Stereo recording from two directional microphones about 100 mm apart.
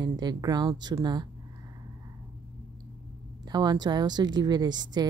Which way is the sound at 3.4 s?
45° right (ahead or behind).